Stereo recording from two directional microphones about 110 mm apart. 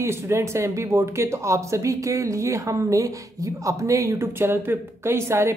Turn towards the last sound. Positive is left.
turn(degrees=-25)  # may be behind; listen again after turning